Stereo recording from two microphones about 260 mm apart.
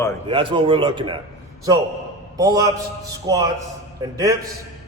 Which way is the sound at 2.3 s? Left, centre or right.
Centre.